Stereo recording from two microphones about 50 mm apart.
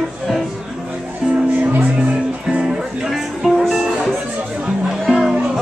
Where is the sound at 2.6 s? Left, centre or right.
Centre.